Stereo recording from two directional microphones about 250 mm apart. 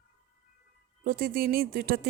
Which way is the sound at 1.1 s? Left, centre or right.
Right.